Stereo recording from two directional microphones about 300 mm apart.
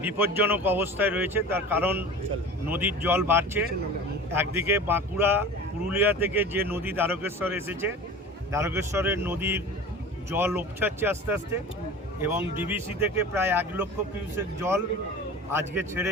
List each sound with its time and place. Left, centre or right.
0.0 s speech: centre